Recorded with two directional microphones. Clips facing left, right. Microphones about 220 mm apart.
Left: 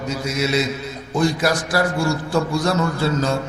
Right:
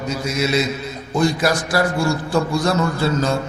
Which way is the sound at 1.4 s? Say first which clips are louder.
Right 1 dB; 15° right (ahead or behind).